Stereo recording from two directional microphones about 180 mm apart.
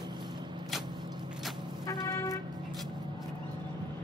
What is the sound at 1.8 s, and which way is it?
Vehicle, 20° left (ahead or behind).